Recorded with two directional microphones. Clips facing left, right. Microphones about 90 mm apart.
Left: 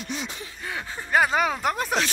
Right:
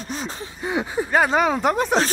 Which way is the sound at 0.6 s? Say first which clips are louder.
Right 11 dB; 20° right (ahead or behind).